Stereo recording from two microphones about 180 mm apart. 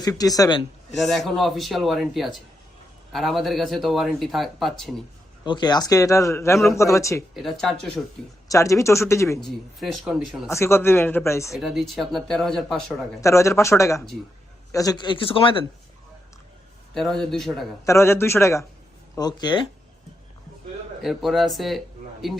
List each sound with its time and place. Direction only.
0.0 s a man's voice: 20° left (ahead or behind)
0.9 s speech: centre (ahead or behind)
5.5 s speech: 25° left (ahead or behind)
7.3 s speech: centre (ahead or behind)
8.4 s speech: 15° left (ahead or behind)
9.4 s speech: centre (ahead or behind)
10.5 s speech: 15° left (ahead or behind)
11.5 s speech: centre (ahead or behind)
13.2 s a man's voice: 15° left (ahead or behind)
16.9 s speech: centre (ahead or behind)
17.8 s a man's voice: 15° left (ahead or behind)
21.0 s speech: centre (ahead or behind)